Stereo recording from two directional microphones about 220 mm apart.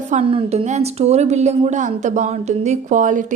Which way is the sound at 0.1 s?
30° right (ahead or behind).